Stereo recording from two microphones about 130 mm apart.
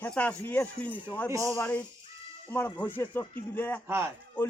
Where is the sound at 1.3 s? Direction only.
25° right (ahead or behind).